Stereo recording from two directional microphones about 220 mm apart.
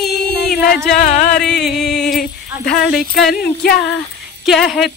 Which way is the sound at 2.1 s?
40° left (ahead or behind).